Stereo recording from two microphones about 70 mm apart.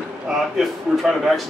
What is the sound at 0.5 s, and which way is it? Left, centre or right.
Speech, centre.